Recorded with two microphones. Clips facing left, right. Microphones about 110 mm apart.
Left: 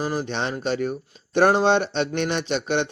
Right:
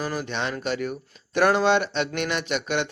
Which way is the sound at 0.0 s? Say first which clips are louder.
Left 2 dB; 30° left (ahead or behind).